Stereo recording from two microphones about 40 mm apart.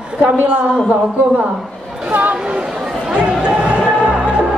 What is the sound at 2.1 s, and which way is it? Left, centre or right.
Speech, right.